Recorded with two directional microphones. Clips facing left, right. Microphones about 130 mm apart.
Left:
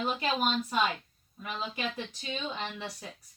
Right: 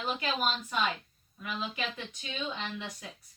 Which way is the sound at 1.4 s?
30° left (ahead or behind).